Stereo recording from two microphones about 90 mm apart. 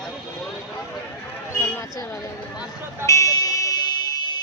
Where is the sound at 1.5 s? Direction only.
30° left (ahead or behind).